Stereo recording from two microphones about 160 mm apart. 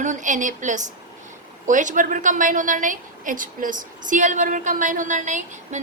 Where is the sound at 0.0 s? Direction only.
50° right (ahead or behind).